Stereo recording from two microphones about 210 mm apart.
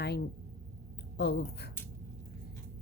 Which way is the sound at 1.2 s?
50° left (ahead or behind).